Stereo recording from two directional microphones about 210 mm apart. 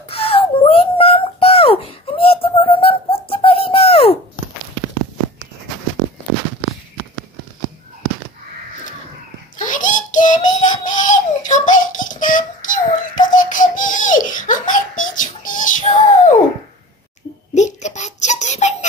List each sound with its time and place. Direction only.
0.1 s a sound: 25° left (ahead or behind)
9.6 s child singing: 40° left (ahead or behind)
17.6 s baby laughter: 35° left (ahead or behind)